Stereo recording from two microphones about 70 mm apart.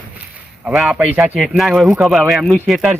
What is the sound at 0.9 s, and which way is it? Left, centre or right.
Speech, centre.